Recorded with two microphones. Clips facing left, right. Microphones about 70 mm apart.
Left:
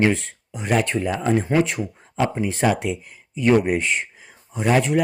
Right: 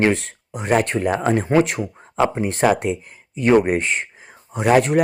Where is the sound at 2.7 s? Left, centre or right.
Right.